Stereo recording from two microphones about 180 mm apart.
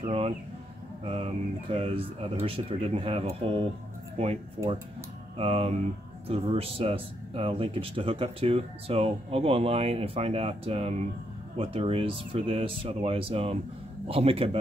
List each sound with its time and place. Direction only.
0.0 s a sound: 30° right (ahead or behind)
1.0 s speech: 35° right (ahead or behind)
5.4 s speech: 35° right (ahead or behind)